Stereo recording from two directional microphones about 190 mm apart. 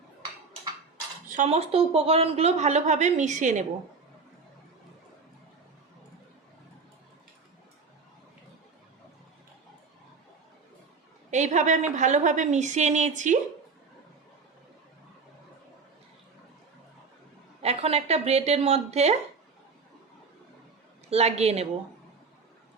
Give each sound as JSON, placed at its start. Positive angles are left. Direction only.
{"t": 1.3, "sound": "a woman's voice", "side_deg": -35}
{"t": 11.3, "sound": "a woman's voice", "side_deg": -40}
{"t": 17.6, "sound": "a woman's voice", "side_deg": -30}
{"t": 21.1, "sound": "a woman's voice", "side_deg": -35}